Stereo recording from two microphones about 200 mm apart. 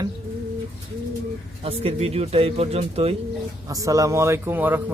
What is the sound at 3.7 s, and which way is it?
A man's voice, 15° right (ahead or behind).